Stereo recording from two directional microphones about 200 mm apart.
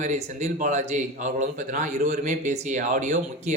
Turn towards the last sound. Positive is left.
turn(degrees=-35)  # may be behind; listen again after turning